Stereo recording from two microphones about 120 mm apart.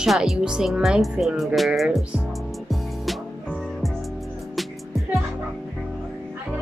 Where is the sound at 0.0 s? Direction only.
5° right (ahead or behind).